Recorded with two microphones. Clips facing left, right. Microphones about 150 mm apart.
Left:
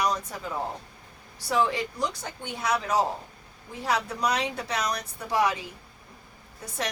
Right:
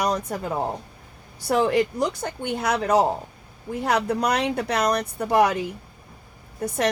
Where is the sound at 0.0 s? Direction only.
55° right (ahead or behind).